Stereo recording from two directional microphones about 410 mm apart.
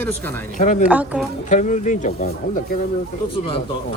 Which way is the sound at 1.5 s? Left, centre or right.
Centre.